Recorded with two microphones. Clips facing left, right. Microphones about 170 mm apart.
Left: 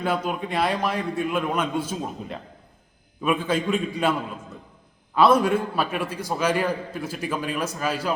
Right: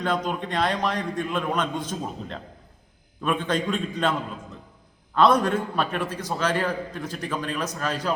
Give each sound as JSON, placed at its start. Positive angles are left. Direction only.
{"t": 0.0, "sound": "a man's voice", "side_deg": 5}
{"t": 5.1, "sound": "a man's voice", "side_deg": 5}